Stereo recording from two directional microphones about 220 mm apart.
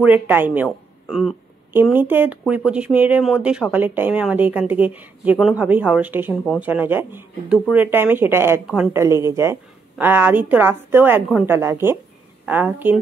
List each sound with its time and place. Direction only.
0.0 s speech: 10° right (ahead or behind)